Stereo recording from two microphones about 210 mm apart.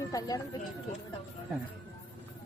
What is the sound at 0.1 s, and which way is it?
Speech, 15° left (ahead or behind).